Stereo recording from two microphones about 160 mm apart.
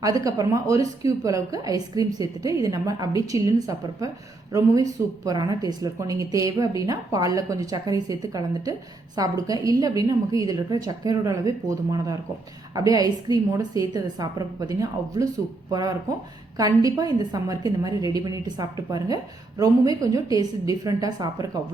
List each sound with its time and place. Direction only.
0.0 s a woman's voice: 20° right (ahead or behind)